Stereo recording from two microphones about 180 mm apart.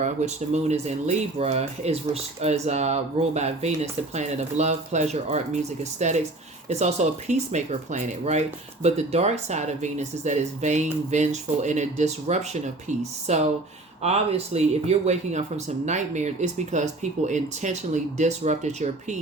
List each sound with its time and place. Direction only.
0.0 s speech: 40° right (ahead or behind)